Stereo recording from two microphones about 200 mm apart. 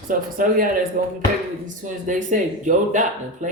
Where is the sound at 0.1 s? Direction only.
45° right (ahead or behind).